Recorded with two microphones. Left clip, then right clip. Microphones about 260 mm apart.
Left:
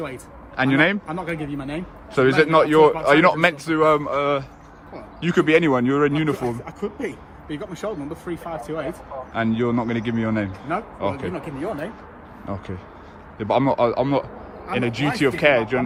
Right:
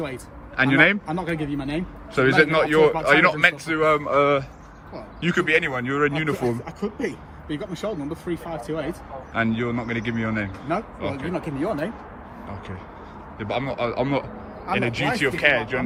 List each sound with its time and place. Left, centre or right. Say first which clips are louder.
0.0 s a man's voice: even; centre
11.6 s speech: right 2 dB; centre
12.5 s a man's voice: left 6 dB; centre